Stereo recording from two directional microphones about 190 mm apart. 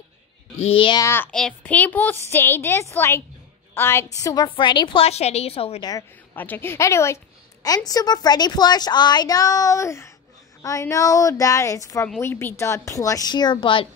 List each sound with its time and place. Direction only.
0.7 s a woman's voice: 25° left (ahead or behind)
1.0 s a woman's voice: 10° left (ahead or behind); by 5.9 s 30° left (ahead or behind)
5.9 s a woman's voice: 15° left (ahead or behind)